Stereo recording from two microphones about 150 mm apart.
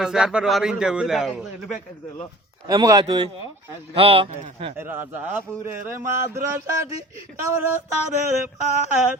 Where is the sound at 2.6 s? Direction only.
25° right (ahead or behind).